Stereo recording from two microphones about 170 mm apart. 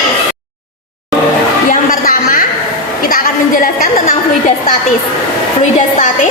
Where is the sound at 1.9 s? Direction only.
55° left (ahead or behind).